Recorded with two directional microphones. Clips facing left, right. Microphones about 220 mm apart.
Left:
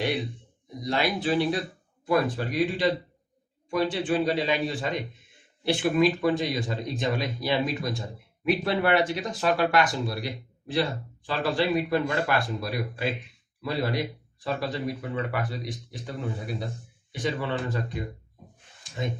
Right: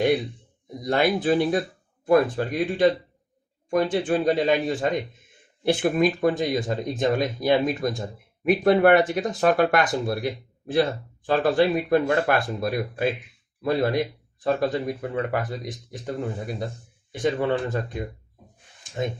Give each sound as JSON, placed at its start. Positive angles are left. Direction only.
{"t": 0.9, "sound": "speech", "side_deg": -50}
{"t": 3.9, "sound": "speech", "side_deg": -50}